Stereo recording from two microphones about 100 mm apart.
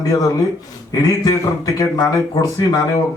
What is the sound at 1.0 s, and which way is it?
A man's voice, 35° left (ahead or behind).